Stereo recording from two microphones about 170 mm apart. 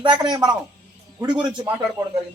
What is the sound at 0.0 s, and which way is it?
A man's voice, 25° right (ahead or behind).